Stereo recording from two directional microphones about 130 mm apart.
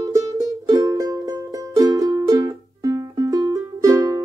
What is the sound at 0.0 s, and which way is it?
Music, 25° right (ahead or behind).